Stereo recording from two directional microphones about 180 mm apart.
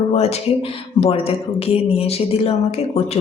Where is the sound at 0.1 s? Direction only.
35° left (ahead or behind).